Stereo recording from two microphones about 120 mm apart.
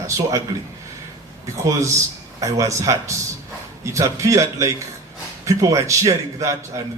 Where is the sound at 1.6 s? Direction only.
25° right (ahead or behind).